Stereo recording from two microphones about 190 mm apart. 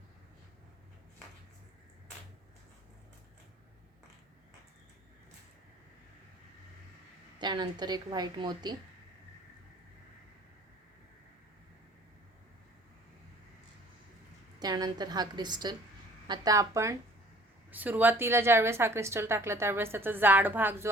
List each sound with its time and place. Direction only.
7.3 s a woman's voice: 25° right (ahead or behind)
14.6 s a woman's voice: 20° right (ahead or behind)